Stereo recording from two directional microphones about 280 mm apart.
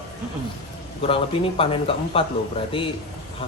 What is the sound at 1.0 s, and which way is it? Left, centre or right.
A man's voice, centre.